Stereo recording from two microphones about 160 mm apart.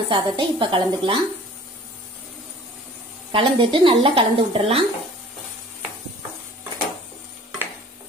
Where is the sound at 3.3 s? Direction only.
30° right (ahead or behind).